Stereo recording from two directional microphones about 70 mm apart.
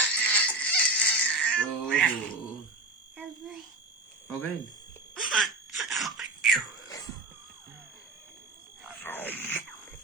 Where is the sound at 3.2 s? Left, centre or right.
Centre.